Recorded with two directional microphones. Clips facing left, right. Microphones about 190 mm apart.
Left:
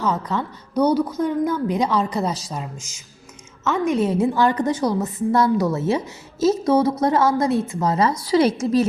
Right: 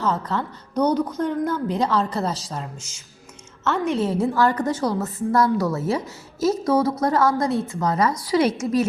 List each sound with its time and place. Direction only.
0.0 s a woman's voice: 10° left (ahead or behind); by 8.9 s 35° left (ahead or behind)